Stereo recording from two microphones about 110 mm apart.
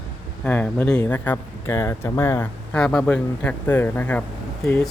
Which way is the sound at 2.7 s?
10° left (ahead or behind).